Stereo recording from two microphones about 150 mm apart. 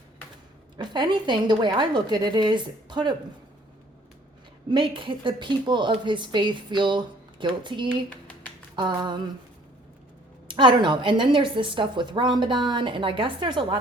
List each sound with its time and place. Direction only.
0.8 s speech: 30° right (ahead or behind)
4.7 s speech: 35° right (ahead or behind)
8.7 s a sound: 30° right (ahead or behind)
10.5 s speech: 30° right (ahead or behind)